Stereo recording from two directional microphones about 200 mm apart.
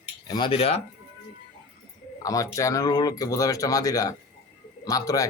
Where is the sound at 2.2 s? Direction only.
15° left (ahead or behind).